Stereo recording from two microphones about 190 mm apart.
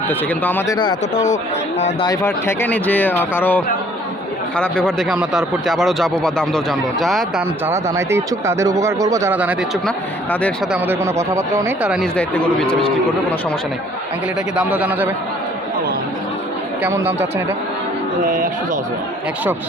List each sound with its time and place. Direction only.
0.1 s speech: 10° left (ahead or behind)
2.0 s speech: 15° left (ahead or behind)
7.7 s speech: 15° right (ahead or behind)
10.7 s speech: 10° right (ahead or behind)
12.1 s speech: 5° left (ahead or behind)
14.5 s speech: 5° right (ahead or behind)
16.8 s speech: 10° right (ahead or behind)
18.2 s speech: 45° right (ahead or behind)